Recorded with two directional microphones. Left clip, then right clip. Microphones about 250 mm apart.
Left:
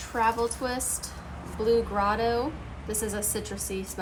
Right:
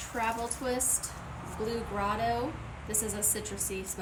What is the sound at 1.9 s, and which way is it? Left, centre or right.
A woman's voice, centre.